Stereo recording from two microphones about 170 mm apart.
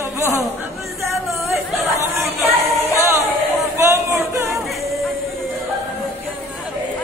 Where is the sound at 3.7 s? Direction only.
15° right (ahead or behind).